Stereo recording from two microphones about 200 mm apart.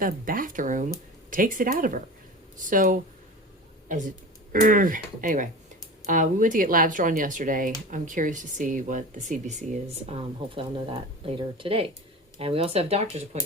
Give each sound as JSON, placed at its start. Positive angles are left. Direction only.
{"t": 0.0, "sound": "speech", "side_deg": -45}
{"t": 10.1, "sound": "speech", "side_deg": -25}